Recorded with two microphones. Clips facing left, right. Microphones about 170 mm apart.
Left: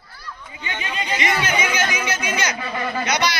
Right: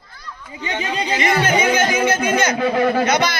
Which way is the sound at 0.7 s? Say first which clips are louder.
Right 5 dB; 40° right (ahead or behind).